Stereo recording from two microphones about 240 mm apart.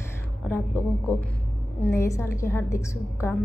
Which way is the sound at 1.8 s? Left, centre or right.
Centre.